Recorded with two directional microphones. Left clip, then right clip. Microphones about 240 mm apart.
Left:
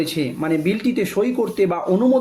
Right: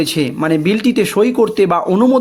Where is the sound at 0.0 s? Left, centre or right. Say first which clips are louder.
Right 6 dB; right.